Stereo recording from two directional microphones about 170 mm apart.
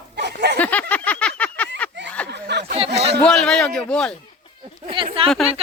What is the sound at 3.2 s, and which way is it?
Speech, 5° left (ahead or behind).